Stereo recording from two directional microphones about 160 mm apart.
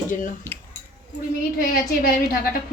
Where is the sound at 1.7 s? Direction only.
60° left (ahead or behind).